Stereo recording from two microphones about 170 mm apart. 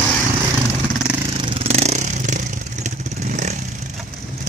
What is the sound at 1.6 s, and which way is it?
Vehicle, 40° right (ahead or behind).